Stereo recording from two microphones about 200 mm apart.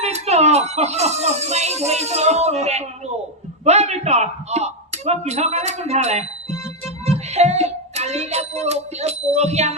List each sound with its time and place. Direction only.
0.0 s music: 35° right (ahead or behind)
3.6 s a sound: 35° right (ahead or behind)
7.0 s child singing: 30° right (ahead or behind)